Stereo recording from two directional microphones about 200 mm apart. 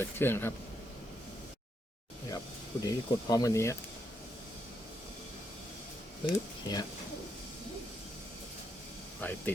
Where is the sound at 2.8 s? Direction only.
20° left (ahead or behind).